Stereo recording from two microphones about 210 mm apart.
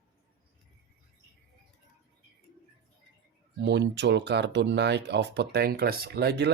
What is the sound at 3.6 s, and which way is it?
Speech, 55° right (ahead or behind).